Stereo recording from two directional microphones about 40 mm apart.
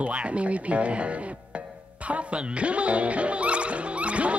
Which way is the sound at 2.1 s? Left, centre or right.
Right.